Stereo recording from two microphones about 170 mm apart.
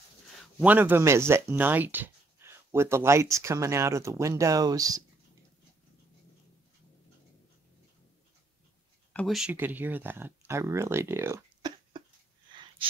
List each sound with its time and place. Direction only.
0.6 s speech: 10° right (ahead or behind)
9.1 s speech: centre (ahead or behind); by 12.0 s 20° right (ahead or behind)